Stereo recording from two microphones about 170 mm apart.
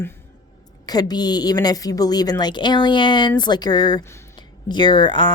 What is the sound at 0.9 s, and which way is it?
A woman's voice, 25° left (ahead or behind).